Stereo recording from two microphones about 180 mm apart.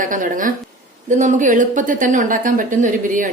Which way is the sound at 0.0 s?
45° right (ahead or behind).